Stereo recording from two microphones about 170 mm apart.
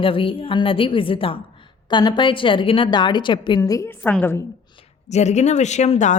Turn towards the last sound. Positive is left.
turn(degrees=45)  # may be behind; listen again after turning